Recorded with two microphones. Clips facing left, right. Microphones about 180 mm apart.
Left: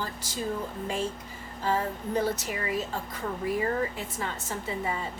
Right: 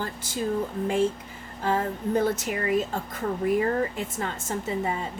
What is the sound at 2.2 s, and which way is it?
Speech, 50° right (ahead or behind).